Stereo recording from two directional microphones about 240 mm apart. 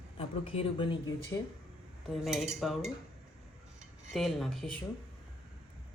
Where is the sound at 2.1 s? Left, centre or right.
Centre.